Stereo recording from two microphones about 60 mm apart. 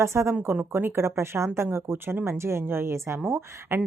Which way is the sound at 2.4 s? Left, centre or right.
Right.